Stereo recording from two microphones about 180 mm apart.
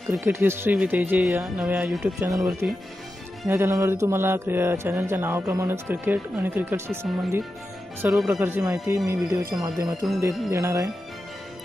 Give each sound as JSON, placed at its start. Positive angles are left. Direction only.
{"t": 0.1, "sound": "mantra", "side_deg": -15}
{"t": 2.1, "sound": "mantra", "side_deg": -20}
{"t": 8.0, "sound": "speech", "side_deg": 0}
{"t": 8.4, "sound": "mantra", "side_deg": -15}